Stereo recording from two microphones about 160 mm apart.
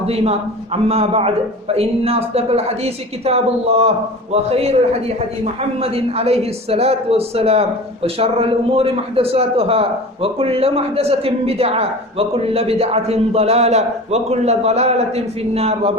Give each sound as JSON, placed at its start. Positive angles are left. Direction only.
{"t": 0.0, "sound": "speech", "side_deg": -40}